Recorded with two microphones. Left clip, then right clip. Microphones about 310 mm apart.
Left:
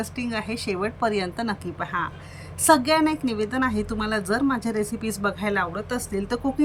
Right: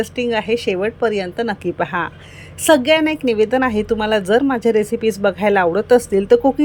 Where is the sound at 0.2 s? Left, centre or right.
Centre.